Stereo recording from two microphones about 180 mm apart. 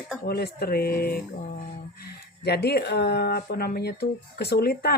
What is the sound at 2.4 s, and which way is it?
Speech, 65° left (ahead or behind).